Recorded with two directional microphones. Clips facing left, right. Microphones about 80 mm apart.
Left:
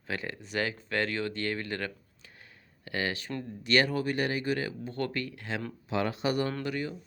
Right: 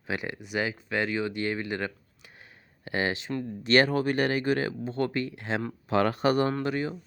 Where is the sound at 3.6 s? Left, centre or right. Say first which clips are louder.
Right 4 dB; right.